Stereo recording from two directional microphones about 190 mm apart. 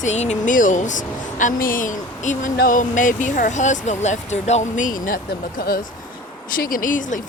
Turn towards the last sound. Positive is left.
turn(degrees=45)  # may be behind; listen again after turning